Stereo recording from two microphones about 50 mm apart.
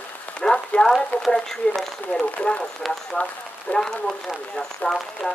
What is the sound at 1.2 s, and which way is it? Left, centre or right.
Speech, centre.